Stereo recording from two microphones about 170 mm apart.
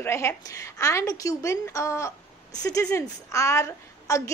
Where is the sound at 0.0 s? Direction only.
15° left (ahead or behind).